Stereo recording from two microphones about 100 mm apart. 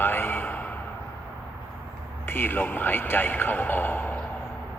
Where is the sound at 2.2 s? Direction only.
20° left (ahead or behind).